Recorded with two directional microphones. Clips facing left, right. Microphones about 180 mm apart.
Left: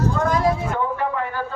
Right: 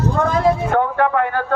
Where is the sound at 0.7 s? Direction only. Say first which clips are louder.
Right 7 dB; 65° right (ahead or behind).